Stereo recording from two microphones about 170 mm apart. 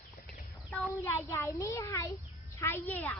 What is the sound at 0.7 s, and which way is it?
A child's voice, 10° left (ahead or behind).